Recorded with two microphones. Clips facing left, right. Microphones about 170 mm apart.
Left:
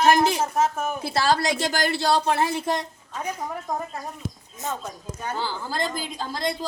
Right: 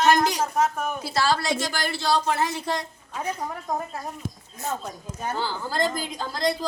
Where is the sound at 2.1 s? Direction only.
30° left (ahead or behind).